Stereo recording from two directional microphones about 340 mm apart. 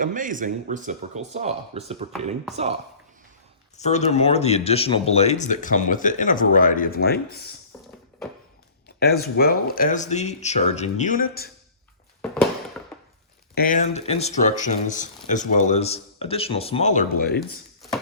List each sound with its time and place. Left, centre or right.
0.0 s speech: right
3.8 s speech: centre
9.0 s speech: left
12.2 s a sound: centre
13.6 s speech: left